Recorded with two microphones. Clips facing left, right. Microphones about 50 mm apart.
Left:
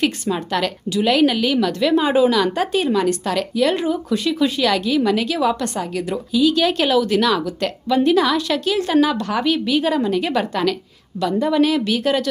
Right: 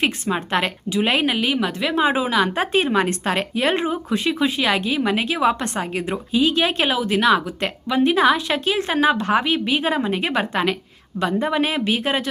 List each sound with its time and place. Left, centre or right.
0.0 s a woman's voice: right